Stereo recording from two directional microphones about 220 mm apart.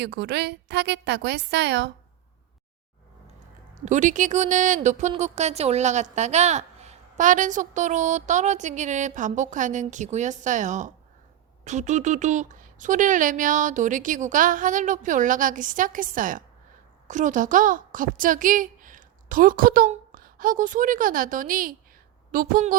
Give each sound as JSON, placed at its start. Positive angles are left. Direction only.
{"t": 0.0, "sound": "a woman's voice", "side_deg": -50}
{"t": 3.8, "sound": "a woman's voice", "side_deg": -35}